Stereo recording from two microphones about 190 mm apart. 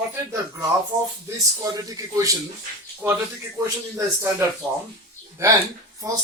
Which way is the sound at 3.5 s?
15° right (ahead or behind).